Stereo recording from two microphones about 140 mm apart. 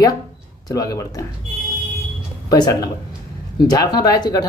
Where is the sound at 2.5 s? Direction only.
25° left (ahead or behind).